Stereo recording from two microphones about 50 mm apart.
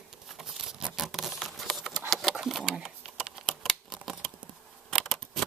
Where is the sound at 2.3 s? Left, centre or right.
Centre.